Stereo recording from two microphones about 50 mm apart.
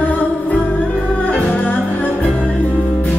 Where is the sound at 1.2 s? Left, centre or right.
Left.